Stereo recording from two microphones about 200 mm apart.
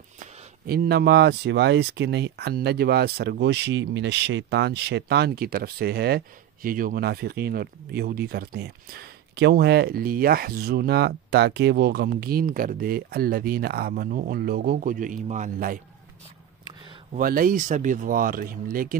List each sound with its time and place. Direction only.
0.7 s speech: 55° right (ahead or behind)
17.1 s speech: 45° right (ahead or behind)